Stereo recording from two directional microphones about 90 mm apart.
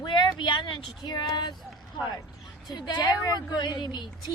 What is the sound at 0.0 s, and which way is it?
Speech, 60° left (ahead or behind).